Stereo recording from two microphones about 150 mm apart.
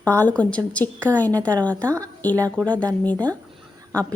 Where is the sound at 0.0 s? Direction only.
10° left (ahead or behind).